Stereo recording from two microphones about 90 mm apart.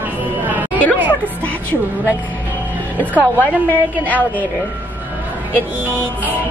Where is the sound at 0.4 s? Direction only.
20° right (ahead or behind).